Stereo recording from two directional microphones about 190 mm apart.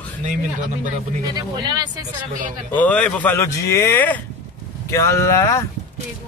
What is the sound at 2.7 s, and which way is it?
Speech, 10° left (ahead or behind).